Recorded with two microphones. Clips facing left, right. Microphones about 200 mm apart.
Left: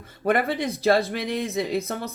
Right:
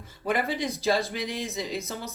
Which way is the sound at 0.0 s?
60° left (ahead or behind).